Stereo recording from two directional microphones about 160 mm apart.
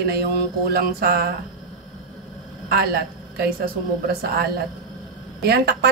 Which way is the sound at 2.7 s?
80° right.